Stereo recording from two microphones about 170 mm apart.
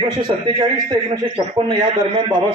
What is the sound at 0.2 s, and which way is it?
A man's voice, 25° right (ahead or behind).